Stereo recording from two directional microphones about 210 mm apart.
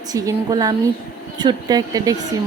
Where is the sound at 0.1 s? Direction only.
15° right (ahead or behind).